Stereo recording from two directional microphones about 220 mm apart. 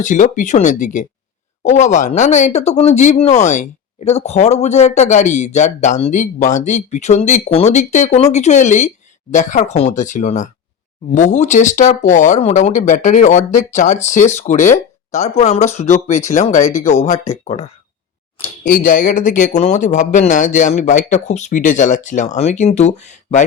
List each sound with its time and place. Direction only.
0.0 s speech: 35° left (ahead or behind)
18.3 s a sound: 25° left (ahead or behind)
18.7 s speech: 40° left (ahead or behind)